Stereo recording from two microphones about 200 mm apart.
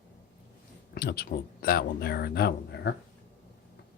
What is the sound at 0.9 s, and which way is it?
Speech, 50° left (ahead or behind).